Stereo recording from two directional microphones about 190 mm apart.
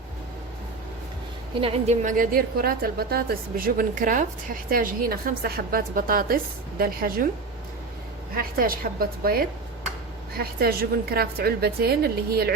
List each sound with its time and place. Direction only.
1.6 s a woman's voice: 35° right (ahead or behind); by 7.3 s 50° right (ahead or behind)
8.4 s a woman's voice: 50° right (ahead or behind)